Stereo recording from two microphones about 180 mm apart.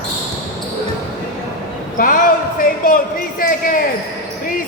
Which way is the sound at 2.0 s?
50° left (ahead or behind).